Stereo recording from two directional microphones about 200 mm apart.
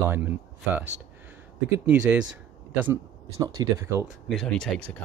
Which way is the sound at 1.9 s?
5° right (ahead or behind).